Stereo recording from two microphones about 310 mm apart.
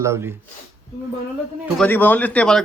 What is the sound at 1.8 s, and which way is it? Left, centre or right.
Speech, centre.